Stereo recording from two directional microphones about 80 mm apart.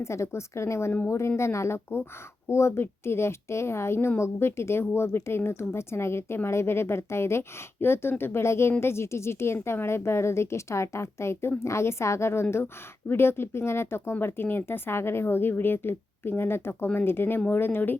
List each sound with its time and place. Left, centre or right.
0.0 s a woman's voice: left